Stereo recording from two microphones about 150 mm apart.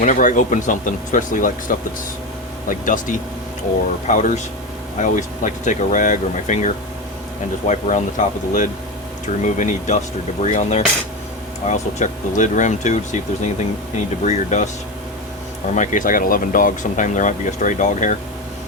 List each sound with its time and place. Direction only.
0.0 s speech: 60° left (ahead or behind)
15.7 s speech: 55° left (ahead or behind)